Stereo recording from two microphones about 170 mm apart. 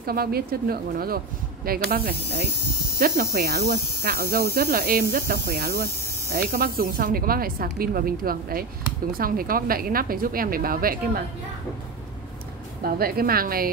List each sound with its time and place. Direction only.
0.0 s speech: 60° right (ahead or behind)
12.8 s speech: 60° right (ahead or behind)